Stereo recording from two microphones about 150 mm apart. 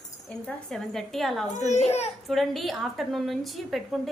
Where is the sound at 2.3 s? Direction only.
Centre (ahead or behind).